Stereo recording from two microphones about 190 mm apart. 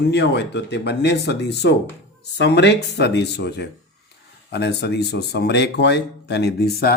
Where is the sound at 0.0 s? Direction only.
60° left (ahead or behind).